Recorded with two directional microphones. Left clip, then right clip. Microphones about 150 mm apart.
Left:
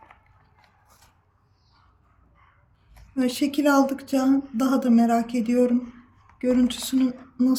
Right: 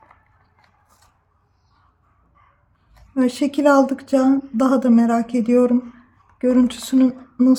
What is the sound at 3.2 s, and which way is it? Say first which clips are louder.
Speech: right 5 dB; 55° right (ahead or behind).